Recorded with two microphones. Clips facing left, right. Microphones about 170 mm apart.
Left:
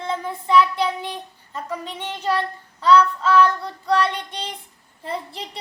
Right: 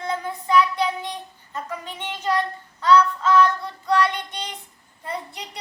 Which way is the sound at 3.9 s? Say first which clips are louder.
Even; 30° left (ahead or behind).